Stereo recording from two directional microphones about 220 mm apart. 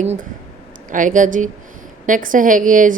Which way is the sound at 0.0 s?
30° right (ahead or behind).